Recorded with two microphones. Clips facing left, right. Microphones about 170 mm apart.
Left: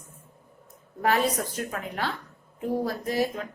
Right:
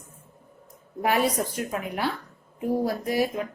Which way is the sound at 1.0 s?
10° right (ahead or behind).